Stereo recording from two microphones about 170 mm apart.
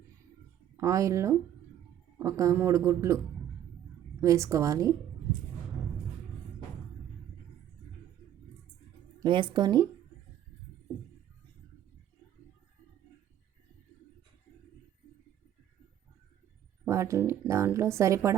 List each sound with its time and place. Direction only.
0.8 s speech: 20° right (ahead or behind)
4.2 s a woman's voice: 20° right (ahead or behind)
9.2 s a woman's voice: 30° right (ahead or behind)
16.8 s speech: 15° right (ahead or behind)